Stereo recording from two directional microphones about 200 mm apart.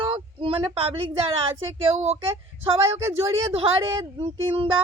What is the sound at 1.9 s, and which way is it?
Speech, 35° right (ahead or behind).